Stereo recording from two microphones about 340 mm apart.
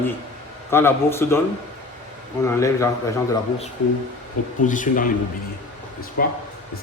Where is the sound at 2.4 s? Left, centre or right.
Centre.